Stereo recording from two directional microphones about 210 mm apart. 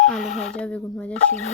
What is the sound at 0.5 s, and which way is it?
Speech, 5° left (ahead or behind).